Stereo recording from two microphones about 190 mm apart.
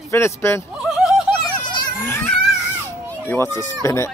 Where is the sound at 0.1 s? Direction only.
15° left (ahead or behind).